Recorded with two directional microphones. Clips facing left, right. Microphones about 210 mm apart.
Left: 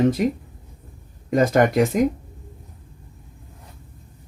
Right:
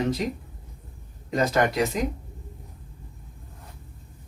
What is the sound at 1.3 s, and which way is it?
Speech, 50° left (ahead or behind).